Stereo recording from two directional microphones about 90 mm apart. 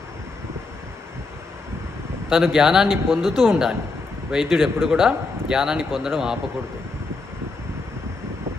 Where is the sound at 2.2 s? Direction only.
5° right (ahead or behind).